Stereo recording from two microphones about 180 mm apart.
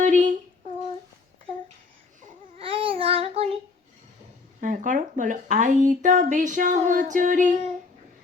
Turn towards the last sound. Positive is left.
turn(degrees=-40)  # may be behind; listen again after turning